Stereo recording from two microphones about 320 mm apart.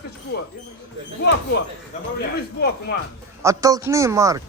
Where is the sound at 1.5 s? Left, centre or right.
Left.